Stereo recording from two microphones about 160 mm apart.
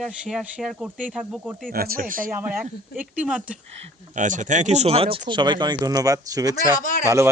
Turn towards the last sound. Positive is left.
turn(degrees=55)  # may be behind; listen again after turning